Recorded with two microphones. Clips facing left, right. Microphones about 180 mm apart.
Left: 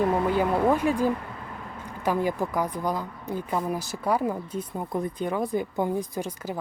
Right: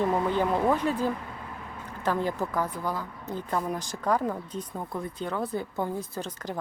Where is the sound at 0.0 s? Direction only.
10° left (ahead or behind).